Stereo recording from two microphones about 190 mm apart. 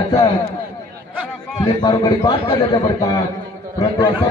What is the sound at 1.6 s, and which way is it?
A man's voice, 20° left (ahead or behind).